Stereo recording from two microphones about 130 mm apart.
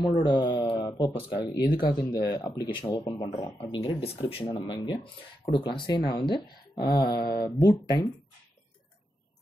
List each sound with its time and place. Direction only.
0.2 s speech: 35° left (ahead or behind)
2.8 s speech: 25° left (ahead or behind)
3.6 s speech: 40° left (ahead or behind)